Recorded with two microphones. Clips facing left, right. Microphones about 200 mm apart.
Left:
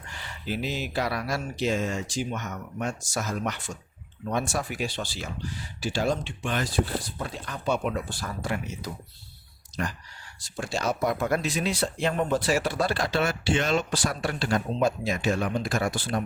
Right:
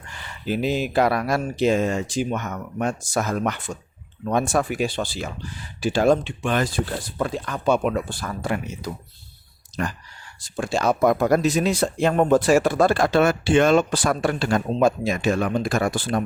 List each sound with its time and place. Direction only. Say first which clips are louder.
0.2 s speech: right 7 dB; 50° right (ahead or behind)
7.2 s speech: right 9 dB; 70° right (ahead or behind)
7.7 s speech: right 6 dB; 60° right (ahead or behind)
10.8 s speech: right 8 dB; 55° right (ahead or behind)
11.2 s speech: right 8 dB; 40° right (ahead or behind)